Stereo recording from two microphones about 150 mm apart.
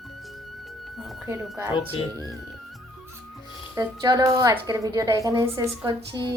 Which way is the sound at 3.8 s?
25° right (ahead or behind).